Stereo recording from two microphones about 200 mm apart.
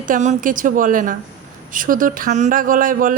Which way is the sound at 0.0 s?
40° right (ahead or behind).